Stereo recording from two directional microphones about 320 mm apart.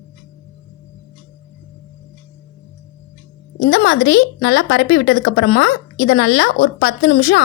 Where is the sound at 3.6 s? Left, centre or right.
Left.